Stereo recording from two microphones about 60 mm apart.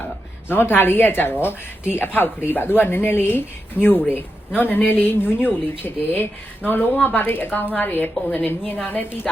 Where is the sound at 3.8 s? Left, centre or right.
Right.